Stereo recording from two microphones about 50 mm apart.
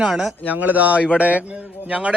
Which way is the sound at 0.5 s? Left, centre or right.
Right.